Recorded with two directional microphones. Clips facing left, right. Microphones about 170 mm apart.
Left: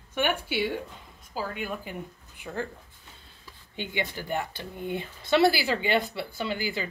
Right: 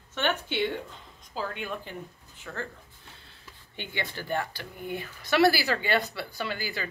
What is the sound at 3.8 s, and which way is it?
Speech, 15° left (ahead or behind).